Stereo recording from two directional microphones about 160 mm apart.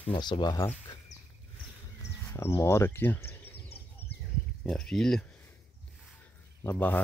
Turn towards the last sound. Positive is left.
turn(degrees=10)  # may be behind; listen again after turning